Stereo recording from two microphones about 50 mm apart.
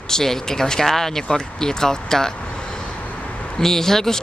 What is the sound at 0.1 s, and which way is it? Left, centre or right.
Speech, centre.